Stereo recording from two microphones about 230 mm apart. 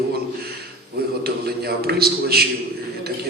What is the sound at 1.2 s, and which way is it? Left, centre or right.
A man's voice, right.